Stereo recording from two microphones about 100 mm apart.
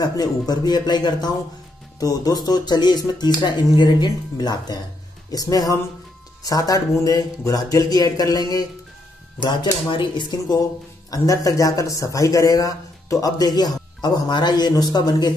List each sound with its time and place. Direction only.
0.0 s speech: 40° left (ahead or behind)
11.1 s speech: 35° left (ahead or behind)